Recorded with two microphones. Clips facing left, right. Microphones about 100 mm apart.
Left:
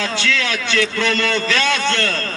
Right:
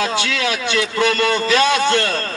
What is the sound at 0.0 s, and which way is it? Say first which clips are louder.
A man's voice: right 1 dB; 15° right (ahead or behind).